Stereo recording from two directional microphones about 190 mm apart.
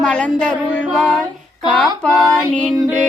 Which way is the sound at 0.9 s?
Centre (ahead or behind).